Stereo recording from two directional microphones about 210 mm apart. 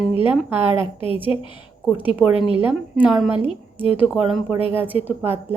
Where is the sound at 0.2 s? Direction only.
10° right (ahead or behind).